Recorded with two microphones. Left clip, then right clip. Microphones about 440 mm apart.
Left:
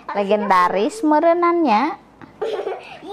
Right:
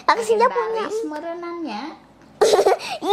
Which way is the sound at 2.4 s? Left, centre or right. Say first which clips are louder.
Right 9 dB; right.